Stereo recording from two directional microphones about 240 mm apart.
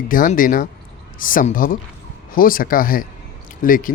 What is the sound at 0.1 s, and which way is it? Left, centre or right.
Speech, left.